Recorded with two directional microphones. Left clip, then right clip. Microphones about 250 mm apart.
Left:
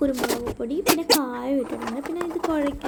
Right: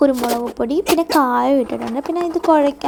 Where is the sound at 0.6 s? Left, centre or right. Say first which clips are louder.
Right 7 dB; right.